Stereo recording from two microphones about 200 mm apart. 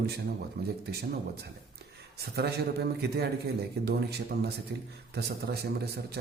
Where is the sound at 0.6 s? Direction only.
50° right (ahead or behind).